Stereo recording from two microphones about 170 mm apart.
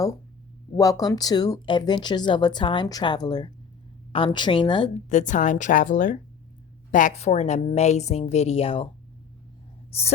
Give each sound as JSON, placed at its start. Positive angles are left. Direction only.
{"t": 0.8, "sound": "speech", "side_deg": 20}
{"t": 5.0, "sound": "a woman's voice", "side_deg": 45}
{"t": 9.9, "sound": "speech", "side_deg": 35}